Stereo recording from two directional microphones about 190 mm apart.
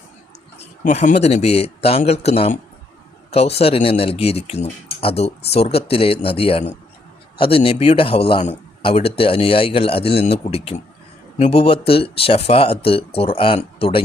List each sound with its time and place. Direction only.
0.6 s a man's voice: 35° left (ahead or behind)